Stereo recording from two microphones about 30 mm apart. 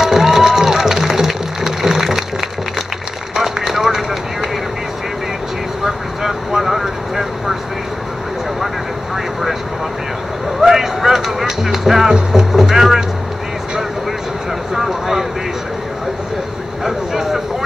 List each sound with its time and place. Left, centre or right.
0.0 s music: centre
3.3 s run: centre
5.9 s vehicle: centre
9.1 s vehicle: centre
10.6 s music: centre
12.1 s music: right
12.5 s a sound: centre
14.7 s a sound: centre
16.8 s a sound: centre